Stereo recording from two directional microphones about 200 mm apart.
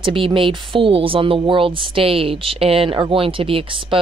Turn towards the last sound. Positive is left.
turn(degrees=-25)  # may be behind; listen again after turning